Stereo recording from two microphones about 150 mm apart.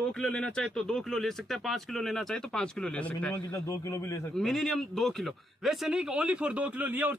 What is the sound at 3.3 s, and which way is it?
A man's voice, 20° left (ahead or behind).